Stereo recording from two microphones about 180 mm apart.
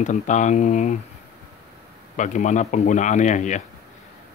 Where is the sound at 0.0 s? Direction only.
40° left (ahead or behind).